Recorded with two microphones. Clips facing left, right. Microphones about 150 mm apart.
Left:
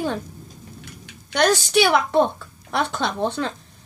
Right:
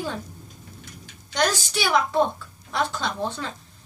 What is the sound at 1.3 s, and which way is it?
A woman's voice, 65° left (ahead or behind).